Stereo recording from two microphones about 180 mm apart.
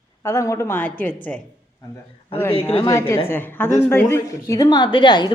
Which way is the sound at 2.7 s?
20° left (ahead or behind).